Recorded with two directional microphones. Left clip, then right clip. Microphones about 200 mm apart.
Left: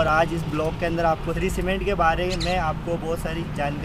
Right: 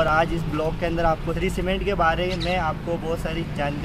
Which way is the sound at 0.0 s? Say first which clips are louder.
Even; 10° left (ahead or behind).